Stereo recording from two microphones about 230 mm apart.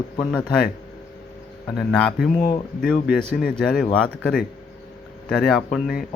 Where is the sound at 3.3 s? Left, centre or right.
Left.